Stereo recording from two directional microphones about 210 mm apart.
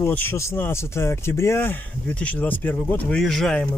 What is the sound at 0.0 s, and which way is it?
Speech, 10° left (ahead or behind).